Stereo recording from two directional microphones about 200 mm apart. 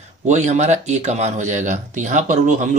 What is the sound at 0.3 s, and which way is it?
Speech, 35° right (ahead or behind).